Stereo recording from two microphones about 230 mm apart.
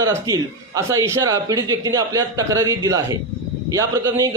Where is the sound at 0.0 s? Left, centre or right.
Centre.